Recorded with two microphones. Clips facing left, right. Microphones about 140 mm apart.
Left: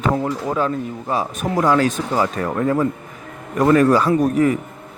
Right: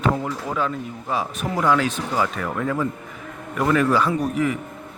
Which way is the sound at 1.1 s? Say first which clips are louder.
Left 3 dB; 40° left (ahead or behind).